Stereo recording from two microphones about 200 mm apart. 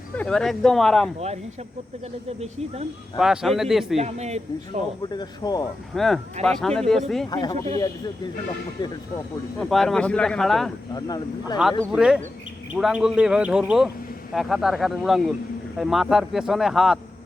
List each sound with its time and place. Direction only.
0.2 s a man's voice: 5° left (ahead or behind)
3.2 s a man's voice: centre (ahead or behind)
3.9 s speech: 35° right (ahead or behind)
5.0 s speech: 20° left (ahead or behind)
5.9 s a man's voice: centre (ahead or behind)
7.3 s speech: 20° left (ahead or behind)
9.6 s a man's voice: centre (ahead or behind)
10.9 s speech: 20° left (ahead or behind)
11.8 s a man's voice: 5° right (ahead or behind)